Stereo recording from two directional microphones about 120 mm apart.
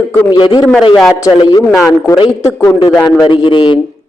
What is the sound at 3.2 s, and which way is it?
Speech, 45° left (ahead or behind).